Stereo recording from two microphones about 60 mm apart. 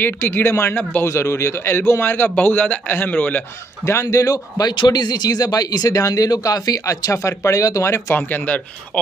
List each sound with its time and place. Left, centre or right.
0.0 s a man's voice: left
3.8 s speech: left
4.9 s speech: left
5.2 s speech: left
7.8 s a man's voice: left